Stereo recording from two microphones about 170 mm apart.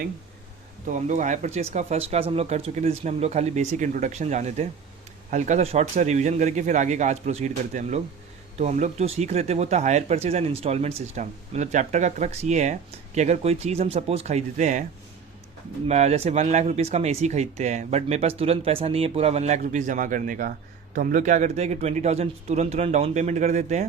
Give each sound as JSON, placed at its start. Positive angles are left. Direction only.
{"t": 0.9, "sound": "a man's voice", "side_deg": -45}
{"t": 15.9, "sound": "speech", "side_deg": -40}